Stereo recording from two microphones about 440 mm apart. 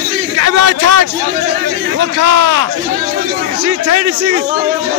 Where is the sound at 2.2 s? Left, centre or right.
Right.